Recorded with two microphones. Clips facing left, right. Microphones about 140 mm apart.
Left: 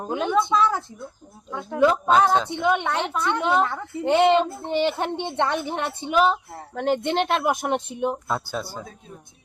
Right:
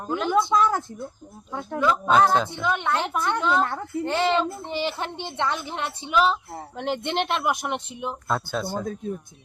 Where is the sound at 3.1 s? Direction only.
5° right (ahead or behind).